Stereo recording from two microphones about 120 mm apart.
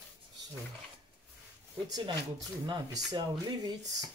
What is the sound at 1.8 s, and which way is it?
Speech, 35° right (ahead or behind).